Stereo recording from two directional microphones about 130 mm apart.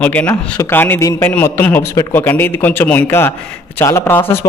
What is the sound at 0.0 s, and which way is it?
A man's voice, 10° left (ahead or behind).